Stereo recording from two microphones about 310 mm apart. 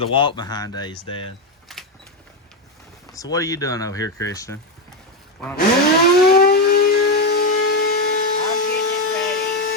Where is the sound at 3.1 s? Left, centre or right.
Centre.